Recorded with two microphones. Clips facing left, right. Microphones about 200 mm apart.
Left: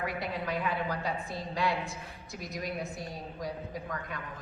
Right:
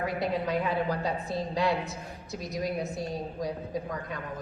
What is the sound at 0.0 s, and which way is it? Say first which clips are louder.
A woman's voice: right 5 dB; 20° right (ahead or behind).